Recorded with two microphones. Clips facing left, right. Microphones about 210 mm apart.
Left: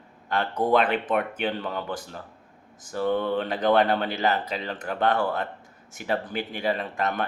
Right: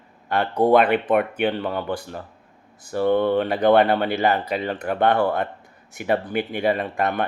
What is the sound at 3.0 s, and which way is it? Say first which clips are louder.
Speech: right 6 dB; 60° right (ahead or behind).